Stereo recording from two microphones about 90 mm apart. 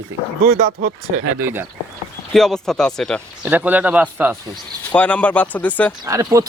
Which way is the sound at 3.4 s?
20° right (ahead or behind).